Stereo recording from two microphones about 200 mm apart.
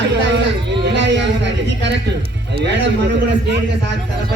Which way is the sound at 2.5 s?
60° right (ahead or behind).